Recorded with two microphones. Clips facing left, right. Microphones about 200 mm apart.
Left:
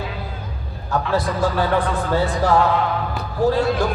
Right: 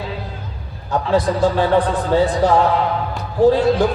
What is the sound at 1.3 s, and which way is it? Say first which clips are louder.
Speech: right 4 dB; 30° right (ahead or behind).